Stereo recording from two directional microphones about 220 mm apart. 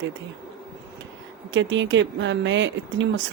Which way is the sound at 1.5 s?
55° right (ahead or behind).